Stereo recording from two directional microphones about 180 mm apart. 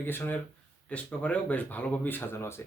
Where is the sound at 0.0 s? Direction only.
10° left (ahead or behind).